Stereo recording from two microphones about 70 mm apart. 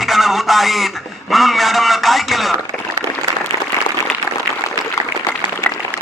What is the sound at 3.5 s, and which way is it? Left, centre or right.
Applause, right.